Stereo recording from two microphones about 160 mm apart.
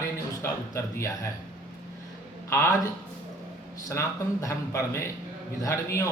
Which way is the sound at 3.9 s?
15° left (ahead or behind).